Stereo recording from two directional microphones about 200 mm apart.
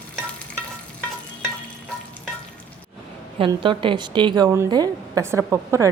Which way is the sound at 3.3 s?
25° right (ahead or behind).